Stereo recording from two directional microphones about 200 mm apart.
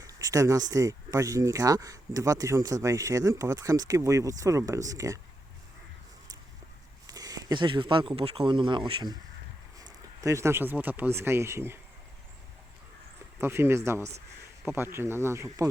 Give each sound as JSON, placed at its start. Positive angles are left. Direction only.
{"t": 0.1, "sound": "speech", "side_deg": -15}
{"t": 7.1, "sound": "speech", "side_deg": -20}
{"t": 13.4, "sound": "speech", "side_deg": -10}